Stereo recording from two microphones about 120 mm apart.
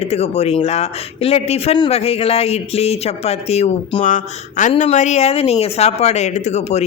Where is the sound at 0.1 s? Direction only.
60° left (ahead or behind).